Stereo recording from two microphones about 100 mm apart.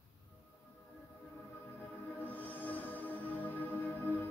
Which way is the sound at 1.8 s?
15° left (ahead or behind).